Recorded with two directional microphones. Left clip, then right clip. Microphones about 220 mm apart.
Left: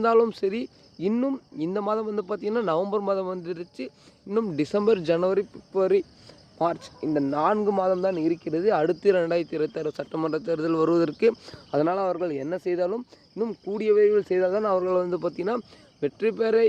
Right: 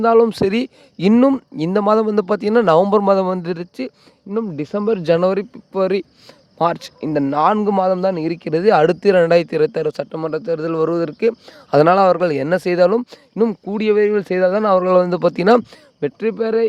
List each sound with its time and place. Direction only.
0.0 s speech: 35° right (ahead or behind)
4.3 s speech: 20° right (ahead or behind)
5.0 s speech: 45° right (ahead or behind)
10.1 s speech: 25° right (ahead or behind)
11.7 s speech: 50° right (ahead or behind); by 16.6 s 30° right (ahead or behind)